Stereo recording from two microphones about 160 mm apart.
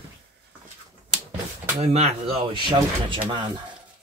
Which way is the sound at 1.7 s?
40° right (ahead or behind).